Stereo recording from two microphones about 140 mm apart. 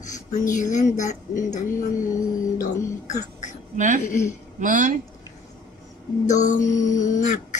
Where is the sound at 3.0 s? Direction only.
60° left (ahead or behind).